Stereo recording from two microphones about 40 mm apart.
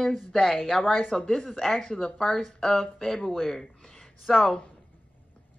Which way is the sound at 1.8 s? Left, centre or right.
Centre.